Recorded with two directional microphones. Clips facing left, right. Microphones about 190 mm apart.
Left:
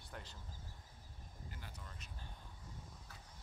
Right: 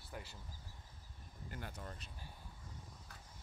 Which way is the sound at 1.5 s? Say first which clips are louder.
Right 10 dB; 55° right (ahead or behind).